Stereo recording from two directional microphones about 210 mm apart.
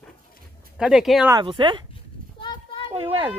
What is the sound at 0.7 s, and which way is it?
Speech, 5° right (ahead or behind).